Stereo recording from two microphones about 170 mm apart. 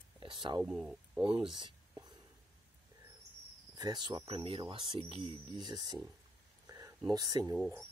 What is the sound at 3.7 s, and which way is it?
Speech, 25° right (ahead or behind).